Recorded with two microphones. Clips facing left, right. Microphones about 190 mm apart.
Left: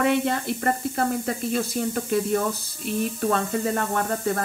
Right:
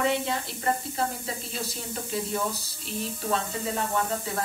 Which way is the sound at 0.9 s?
55° left (ahead or behind).